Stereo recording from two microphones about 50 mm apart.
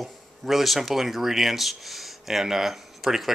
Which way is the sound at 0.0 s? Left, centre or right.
Centre.